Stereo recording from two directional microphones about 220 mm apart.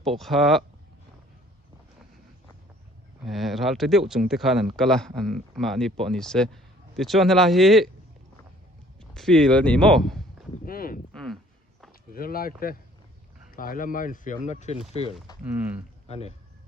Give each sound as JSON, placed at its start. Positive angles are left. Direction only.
{"t": 0.2, "sound": "speech", "side_deg": 0}
{"t": 3.2, "sound": "speech", "side_deg": 0}
{"t": 9.0, "sound": "speech", "side_deg": 0}
{"t": 10.7, "sound": "a sound", "side_deg": 40}
{"t": 12.1, "sound": "speech", "side_deg": 40}
{"t": 15.4, "sound": "speech", "side_deg": -5}
{"t": 16.0, "sound": "speech", "side_deg": 30}